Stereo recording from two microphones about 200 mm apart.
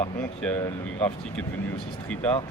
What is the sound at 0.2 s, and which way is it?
Speech, 5° left (ahead or behind).